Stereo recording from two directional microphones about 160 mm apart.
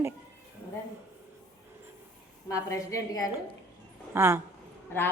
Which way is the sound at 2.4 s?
20° left (ahead or behind).